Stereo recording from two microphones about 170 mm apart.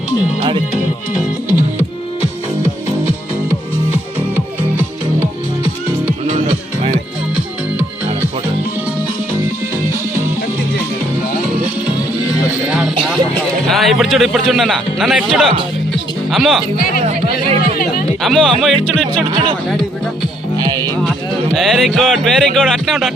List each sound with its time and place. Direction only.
7.3 s music: 10° right (ahead or behind)
12.7 s music: 5° right (ahead or behind)
13.7 s speech: centre (ahead or behind)
18.2 s speech: centre (ahead or behind)
20.6 s music: 25° right (ahead or behind)
21.5 s speech: centre (ahead or behind)